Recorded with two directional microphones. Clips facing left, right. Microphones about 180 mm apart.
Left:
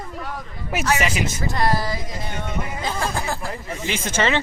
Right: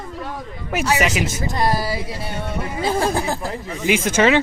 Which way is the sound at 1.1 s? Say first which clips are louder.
Right 2 dB; centre (ahead or behind).